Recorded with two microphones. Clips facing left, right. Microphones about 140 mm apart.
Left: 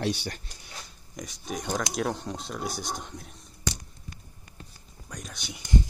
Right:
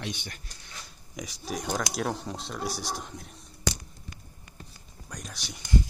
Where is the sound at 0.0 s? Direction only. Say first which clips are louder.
Left 8 dB; 35° left (ahead or behind).